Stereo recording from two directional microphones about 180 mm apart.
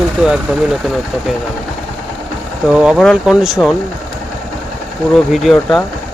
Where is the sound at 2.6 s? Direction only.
5° right (ahead or behind).